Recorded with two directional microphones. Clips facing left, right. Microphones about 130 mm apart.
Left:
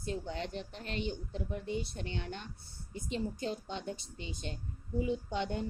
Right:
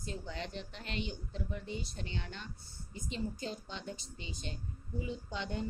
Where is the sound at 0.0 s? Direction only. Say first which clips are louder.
Left 4 dB; 50° left (ahead or behind).